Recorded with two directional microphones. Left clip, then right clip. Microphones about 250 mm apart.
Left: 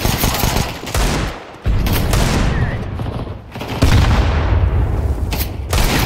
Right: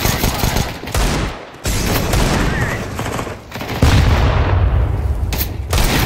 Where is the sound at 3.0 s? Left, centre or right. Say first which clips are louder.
Right 5 dB; right.